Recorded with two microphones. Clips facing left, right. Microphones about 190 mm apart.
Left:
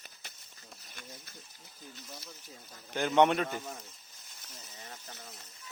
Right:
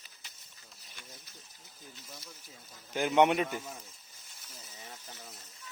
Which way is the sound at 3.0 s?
10° right (ahead or behind).